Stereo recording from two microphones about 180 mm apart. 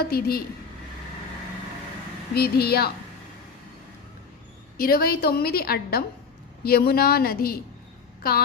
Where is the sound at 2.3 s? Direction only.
60° left (ahead or behind).